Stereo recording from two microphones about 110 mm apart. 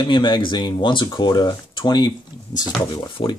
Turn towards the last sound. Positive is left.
turn(degrees=45)  # may be behind; listen again after turning